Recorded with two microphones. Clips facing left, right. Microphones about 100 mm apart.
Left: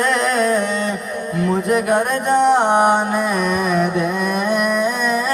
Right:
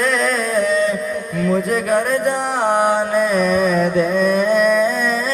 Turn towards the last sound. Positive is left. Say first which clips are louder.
# right 3 dB
turn(degrees=20)  # may be behind; listen again after turning